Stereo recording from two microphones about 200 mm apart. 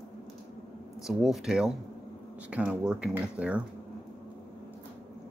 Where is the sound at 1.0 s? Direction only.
Centre (ahead or behind).